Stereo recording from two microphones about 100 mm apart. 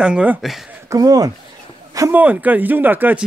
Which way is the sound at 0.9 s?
40° right (ahead or behind).